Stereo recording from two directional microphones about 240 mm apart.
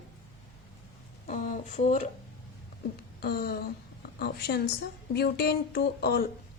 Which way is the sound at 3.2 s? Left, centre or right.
Left.